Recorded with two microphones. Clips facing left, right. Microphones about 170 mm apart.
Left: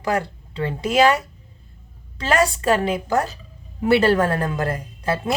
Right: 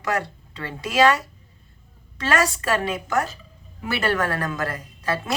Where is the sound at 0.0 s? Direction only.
30° left (ahead or behind).